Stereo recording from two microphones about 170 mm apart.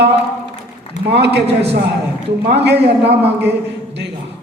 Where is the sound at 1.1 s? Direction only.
85° right.